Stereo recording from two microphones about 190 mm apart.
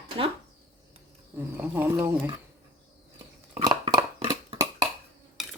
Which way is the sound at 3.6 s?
20° right (ahead or behind).